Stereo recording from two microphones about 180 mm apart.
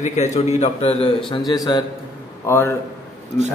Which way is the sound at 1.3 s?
25° left (ahead or behind).